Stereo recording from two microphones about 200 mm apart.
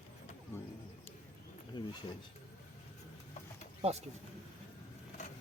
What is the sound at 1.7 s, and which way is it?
Speech, 25° left (ahead or behind).